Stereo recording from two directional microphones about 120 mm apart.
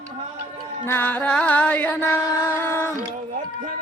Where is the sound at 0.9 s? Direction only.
15° left (ahead or behind).